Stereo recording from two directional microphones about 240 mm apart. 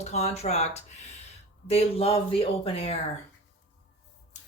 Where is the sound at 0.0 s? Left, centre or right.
Left.